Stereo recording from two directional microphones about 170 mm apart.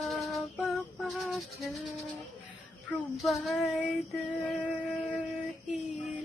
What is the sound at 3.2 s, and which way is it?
Child singing, centre (ahead or behind).